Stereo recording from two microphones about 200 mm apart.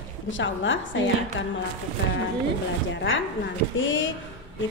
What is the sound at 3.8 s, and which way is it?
Speech, 70° left (ahead or behind).